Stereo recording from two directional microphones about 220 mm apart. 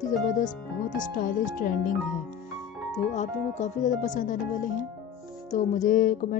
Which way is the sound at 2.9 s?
30° left (ahead or behind).